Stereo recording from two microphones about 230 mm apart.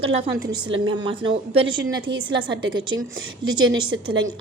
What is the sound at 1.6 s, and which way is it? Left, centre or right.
Speech, right.